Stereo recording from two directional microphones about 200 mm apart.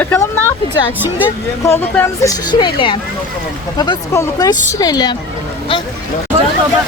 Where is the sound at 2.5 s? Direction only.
20° left (ahead or behind).